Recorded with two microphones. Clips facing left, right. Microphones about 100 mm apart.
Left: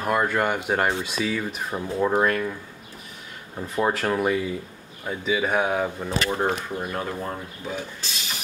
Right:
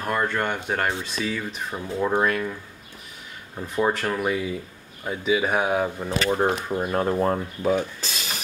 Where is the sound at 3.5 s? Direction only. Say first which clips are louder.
Right 1 dB; centre (ahead or behind).